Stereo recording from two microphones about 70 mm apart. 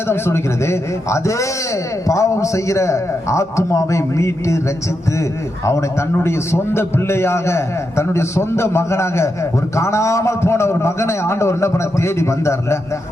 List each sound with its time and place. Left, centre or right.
0.1 s a man's voice: left
6.1 s a man's voice: left